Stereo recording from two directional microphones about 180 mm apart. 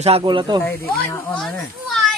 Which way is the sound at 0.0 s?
30° right (ahead or behind).